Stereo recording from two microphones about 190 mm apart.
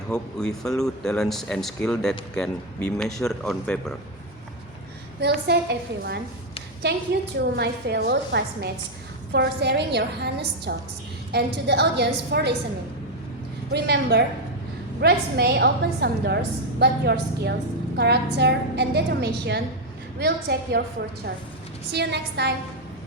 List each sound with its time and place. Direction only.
0.1 s speech: 5° left (ahead or behind)
5.2 s a woman's voice: 60° right (ahead or behind)
7.1 s a woman's voice: 55° right (ahead or behind)
13.7 s a woman's voice: 60° right (ahead or behind)
21.9 s a woman's voice: 60° right (ahead or behind)